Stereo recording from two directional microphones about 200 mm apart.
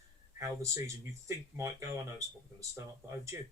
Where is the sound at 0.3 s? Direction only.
15° right (ahead or behind).